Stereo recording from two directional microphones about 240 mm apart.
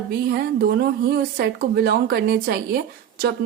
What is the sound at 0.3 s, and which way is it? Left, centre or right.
Speech, right.